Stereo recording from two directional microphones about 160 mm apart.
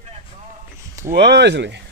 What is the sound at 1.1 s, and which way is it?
Speech, 90° right.